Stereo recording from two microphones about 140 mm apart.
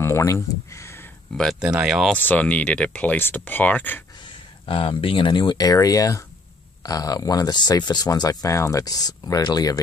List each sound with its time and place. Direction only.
0.0 s a sound: 20° left (ahead or behind)
1.3 s speech: 5° left (ahead or behind)
1.6 s speech: 5° right (ahead or behind)
2.1 s speech: 10° left (ahead or behind)
4.2 s speech: 40° left (ahead or behind)